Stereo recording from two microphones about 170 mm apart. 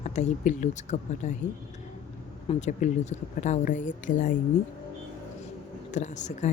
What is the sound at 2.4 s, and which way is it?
Speech, 45° left (ahead or behind).